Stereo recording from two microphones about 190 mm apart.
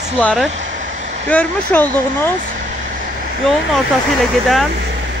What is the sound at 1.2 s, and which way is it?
Speech, 10° left (ahead or behind).